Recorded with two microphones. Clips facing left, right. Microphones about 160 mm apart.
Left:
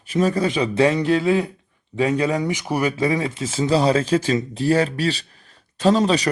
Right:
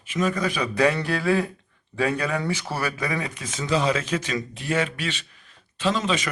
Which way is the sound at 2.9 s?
25° left (ahead or behind).